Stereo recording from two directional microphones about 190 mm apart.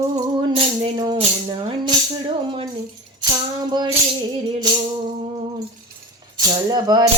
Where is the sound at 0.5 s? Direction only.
25° right (ahead or behind).